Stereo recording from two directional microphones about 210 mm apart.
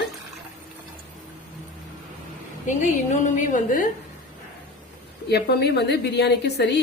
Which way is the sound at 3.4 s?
40° left (ahead or behind).